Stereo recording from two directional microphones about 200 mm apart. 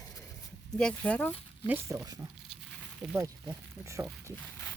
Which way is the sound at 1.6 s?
15° right (ahead or behind).